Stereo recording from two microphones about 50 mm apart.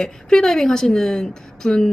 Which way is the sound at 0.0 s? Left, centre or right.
Centre.